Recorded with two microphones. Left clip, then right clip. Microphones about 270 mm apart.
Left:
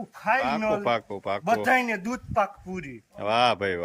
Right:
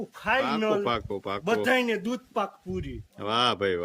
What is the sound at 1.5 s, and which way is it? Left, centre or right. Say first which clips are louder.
Speech: left 1 dB; centre.